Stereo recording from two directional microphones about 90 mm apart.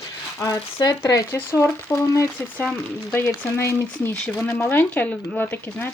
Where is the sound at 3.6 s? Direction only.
30° left (ahead or behind).